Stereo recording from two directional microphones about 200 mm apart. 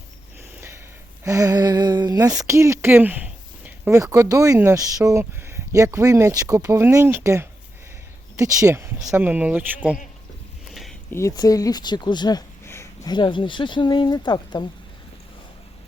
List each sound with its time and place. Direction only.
1.2 s speech: 15° right (ahead or behind)
10.7 s a sound: centre (ahead or behind)
11.1 s speech: 15° left (ahead or behind)